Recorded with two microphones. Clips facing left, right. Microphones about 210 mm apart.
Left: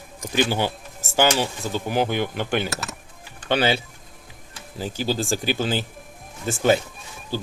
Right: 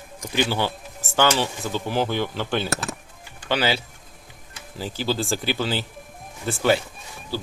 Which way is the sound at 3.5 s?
25° left (ahead or behind).